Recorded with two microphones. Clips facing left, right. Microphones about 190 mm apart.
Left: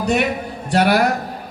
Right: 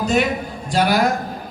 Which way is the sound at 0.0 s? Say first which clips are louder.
Even; 65° left (ahead or behind).